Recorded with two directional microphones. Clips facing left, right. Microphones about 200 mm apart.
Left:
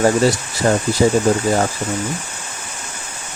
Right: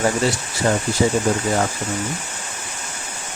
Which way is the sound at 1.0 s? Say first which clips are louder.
Left 4 dB; 35° left (ahead or behind).